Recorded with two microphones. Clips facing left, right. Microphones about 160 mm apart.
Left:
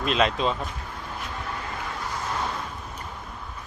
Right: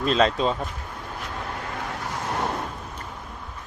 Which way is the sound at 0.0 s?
35° right (ahead or behind).